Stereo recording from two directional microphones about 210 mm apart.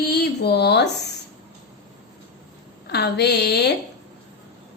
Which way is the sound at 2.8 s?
50° left (ahead or behind).